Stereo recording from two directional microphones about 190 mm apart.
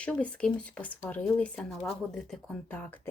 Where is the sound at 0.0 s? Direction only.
5° left (ahead or behind).